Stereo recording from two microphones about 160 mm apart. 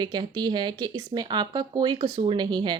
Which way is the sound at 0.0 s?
25° right (ahead or behind).